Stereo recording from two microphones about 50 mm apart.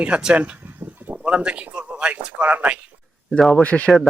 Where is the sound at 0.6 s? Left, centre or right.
Right.